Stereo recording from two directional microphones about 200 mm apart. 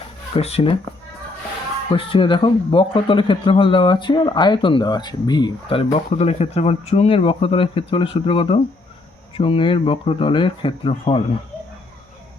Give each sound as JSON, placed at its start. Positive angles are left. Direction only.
{"t": 0.3, "sound": "speech", "side_deg": 30}
{"t": 1.9, "sound": "speech", "side_deg": 25}